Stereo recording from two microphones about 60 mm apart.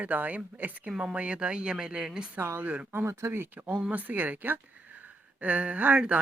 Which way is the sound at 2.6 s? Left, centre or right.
Right.